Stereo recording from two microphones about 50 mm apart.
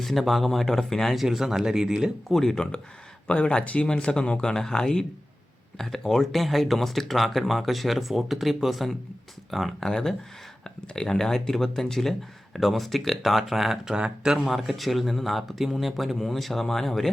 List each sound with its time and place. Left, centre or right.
0.0 s speech: centre
1.1 s speech: centre
2.3 s speech: centre
3.2 s speech: left; by 9.7 s centre
9.8 s speech: centre
13.9 s speech: centre
14.4 s speech: centre